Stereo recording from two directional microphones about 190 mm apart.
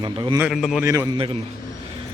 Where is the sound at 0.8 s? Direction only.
15° right (ahead or behind).